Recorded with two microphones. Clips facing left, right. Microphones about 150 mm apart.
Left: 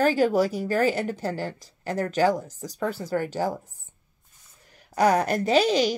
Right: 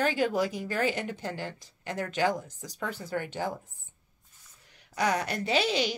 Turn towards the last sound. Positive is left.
turn(degrees=40)  # may be behind; listen again after turning